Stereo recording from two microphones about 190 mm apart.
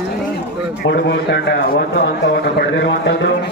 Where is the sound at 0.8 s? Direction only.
65° left (ahead or behind).